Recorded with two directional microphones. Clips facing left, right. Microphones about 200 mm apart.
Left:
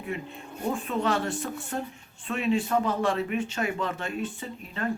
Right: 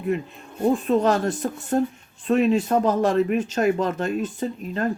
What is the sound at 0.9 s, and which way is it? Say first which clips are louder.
Speech: right 7 dB; 40° right (ahead or behind).